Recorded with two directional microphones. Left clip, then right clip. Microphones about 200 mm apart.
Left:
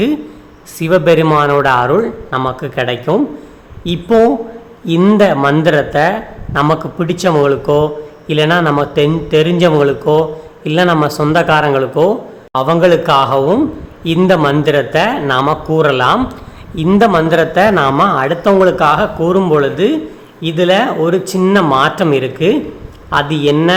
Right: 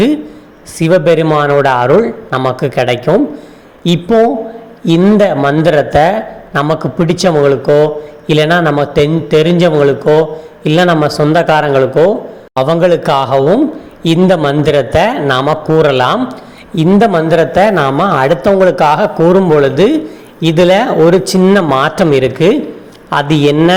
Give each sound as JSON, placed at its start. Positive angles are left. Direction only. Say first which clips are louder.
{"t": 0.8, "sound": "a man's voice", "louder": "right 1 dB", "side_deg": -10}